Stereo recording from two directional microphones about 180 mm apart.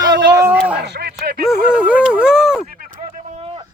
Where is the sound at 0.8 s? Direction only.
65° right (ahead or behind).